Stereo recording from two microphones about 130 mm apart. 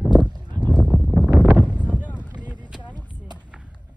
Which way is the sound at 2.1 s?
10° right (ahead or behind).